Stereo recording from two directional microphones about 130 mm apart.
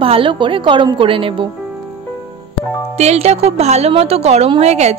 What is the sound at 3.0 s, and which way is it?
A woman's voice, 55° right (ahead or behind).